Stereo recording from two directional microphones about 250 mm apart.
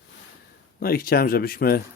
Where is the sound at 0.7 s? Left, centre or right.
Left.